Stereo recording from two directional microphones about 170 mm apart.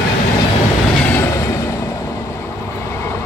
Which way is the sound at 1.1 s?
15° left (ahead or behind).